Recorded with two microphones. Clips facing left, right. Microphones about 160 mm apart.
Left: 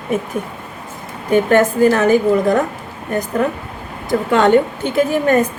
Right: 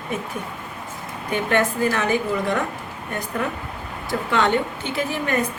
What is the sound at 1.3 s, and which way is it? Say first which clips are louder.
A woman's voice: left 9 dB; 40° left (ahead or behind).